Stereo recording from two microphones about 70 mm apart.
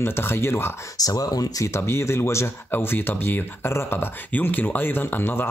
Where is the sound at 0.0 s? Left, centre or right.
Left.